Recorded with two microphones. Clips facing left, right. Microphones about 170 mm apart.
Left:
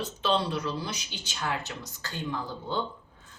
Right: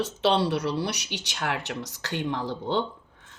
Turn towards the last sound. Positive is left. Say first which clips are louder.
# even
turn(degrees=-75)  # may be behind; listen again after turning